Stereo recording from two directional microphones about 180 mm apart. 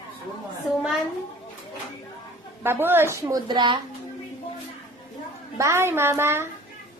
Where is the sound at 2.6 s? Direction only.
10° right (ahead or behind).